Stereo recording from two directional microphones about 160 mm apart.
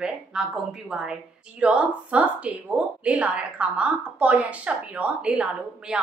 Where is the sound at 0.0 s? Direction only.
5° right (ahead or behind).